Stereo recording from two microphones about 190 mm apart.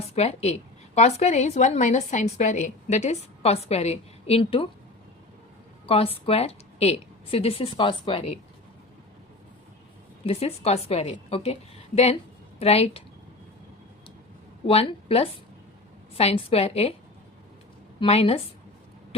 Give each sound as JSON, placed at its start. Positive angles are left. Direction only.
{"t": 0.1, "sound": "a woman's voice", "side_deg": 35}
{"t": 5.8, "sound": "a woman's voice", "side_deg": 30}
{"t": 10.2, "sound": "a woman's voice", "side_deg": 30}
{"t": 12.5, "sound": "speech", "side_deg": 30}
{"t": 14.7, "sound": "a woman's voice", "side_deg": 30}
{"t": 18.0, "sound": "a woman's voice", "side_deg": 30}